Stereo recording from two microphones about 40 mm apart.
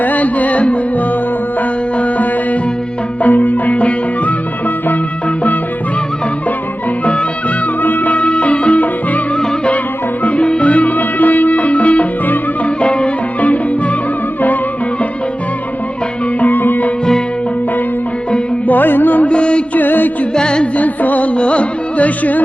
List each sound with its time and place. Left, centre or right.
0.0 s music: left
7.8 s music: left
10.2 s music: left
16.4 s music: left
18.7 s music: left
19.3 s music: left
19.7 s music: left
20.3 s music: left
20.7 s music: left
21.3 s music: left